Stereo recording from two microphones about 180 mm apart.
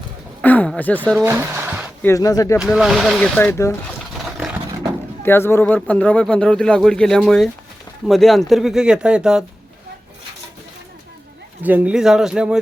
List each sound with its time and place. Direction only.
0.4 s speech: 10° left (ahead or behind)
1.1 s speech: 10° right (ahead or behind)
2.0 s speech: 15° left (ahead or behind)
2.6 s speech: centre (ahead or behind)
4.4 s a sound: 5° right (ahead or behind)
5.2 s speech: 15° left (ahead or behind); by 9.4 s 5° right (ahead or behind)
11.6 s speech: 10° right (ahead or behind)